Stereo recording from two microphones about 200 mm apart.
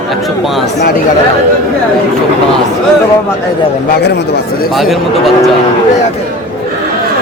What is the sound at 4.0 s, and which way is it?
Speech, 55° left (ahead or behind).